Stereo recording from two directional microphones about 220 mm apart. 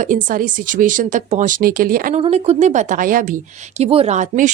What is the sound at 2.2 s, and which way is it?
Speech, 30° right (ahead or behind).